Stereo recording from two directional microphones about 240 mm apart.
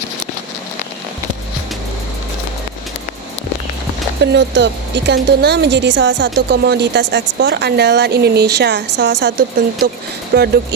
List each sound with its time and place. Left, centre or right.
4.2 s a woman's voice: right
10.3 s speech: right